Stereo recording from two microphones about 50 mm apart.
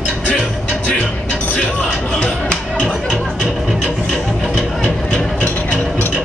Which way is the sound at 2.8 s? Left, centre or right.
Centre.